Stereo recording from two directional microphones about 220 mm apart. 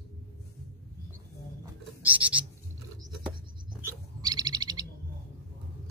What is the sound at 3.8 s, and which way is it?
Bird, 15° right (ahead or behind).